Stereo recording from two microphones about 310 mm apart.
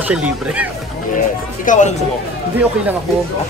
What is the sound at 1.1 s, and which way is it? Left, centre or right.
Speech, left.